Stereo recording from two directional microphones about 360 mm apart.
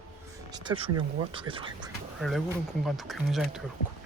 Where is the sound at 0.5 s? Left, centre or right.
Centre.